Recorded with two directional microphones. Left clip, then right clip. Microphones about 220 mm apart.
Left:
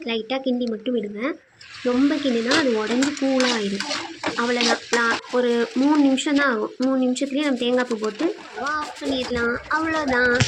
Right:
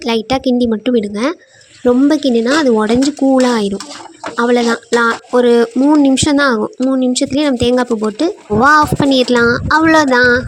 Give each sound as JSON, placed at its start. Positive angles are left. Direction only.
{"t": 0.0, "sound": "speech", "side_deg": -55}